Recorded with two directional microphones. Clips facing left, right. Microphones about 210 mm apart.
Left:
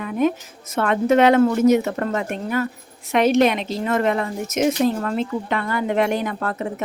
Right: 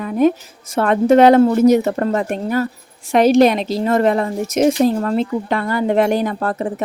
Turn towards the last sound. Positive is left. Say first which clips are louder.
# right 5 dB
turn(degrees=-35)  # may be behind; listen again after turning